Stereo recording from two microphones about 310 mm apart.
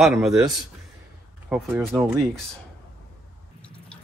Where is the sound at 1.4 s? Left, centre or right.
Centre.